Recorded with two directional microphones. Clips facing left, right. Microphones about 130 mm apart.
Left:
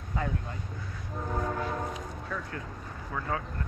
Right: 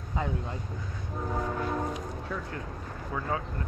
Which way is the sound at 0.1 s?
20° right (ahead or behind).